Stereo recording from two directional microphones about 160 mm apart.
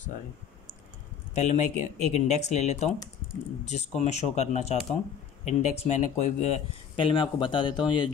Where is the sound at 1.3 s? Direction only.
45° left (ahead or behind).